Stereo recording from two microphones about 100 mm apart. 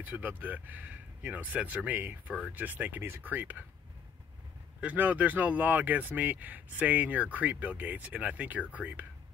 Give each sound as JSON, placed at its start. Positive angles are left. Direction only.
{"t": 0.0, "sound": "speech", "side_deg": -15}
{"t": 4.7, "sound": "speech", "side_deg": -15}